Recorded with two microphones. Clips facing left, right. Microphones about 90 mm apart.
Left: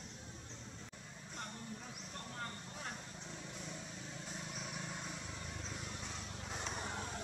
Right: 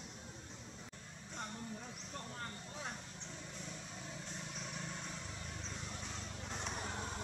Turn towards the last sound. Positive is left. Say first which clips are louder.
# even
turn(degrees=0)  # may be behind; listen again after turning